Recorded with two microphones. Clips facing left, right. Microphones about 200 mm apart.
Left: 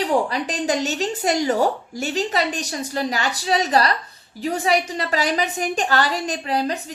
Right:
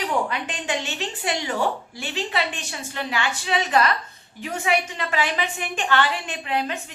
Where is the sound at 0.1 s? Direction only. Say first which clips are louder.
Left 5 dB; 35° left (ahead or behind).